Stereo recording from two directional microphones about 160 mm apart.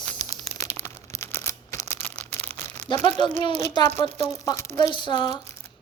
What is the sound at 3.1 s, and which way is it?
Speech, 30° left (ahead or behind).